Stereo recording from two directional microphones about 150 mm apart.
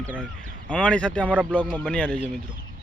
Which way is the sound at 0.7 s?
5° left (ahead or behind).